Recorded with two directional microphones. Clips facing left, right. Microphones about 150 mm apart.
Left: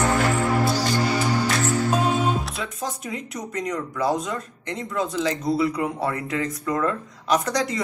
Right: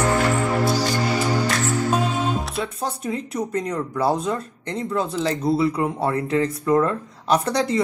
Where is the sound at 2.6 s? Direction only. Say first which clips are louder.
Right 4 dB; 30° right (ahead or behind).